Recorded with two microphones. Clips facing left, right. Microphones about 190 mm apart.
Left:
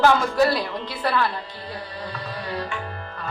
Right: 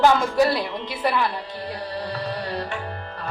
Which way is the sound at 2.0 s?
35° right (ahead or behind).